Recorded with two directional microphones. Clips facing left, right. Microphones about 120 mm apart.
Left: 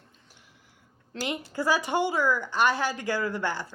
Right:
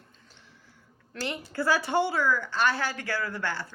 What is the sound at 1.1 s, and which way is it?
A woman's voice, 15° left (ahead or behind).